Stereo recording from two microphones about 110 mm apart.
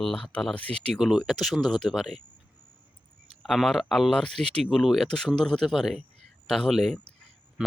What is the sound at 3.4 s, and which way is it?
Speech, centre (ahead or behind).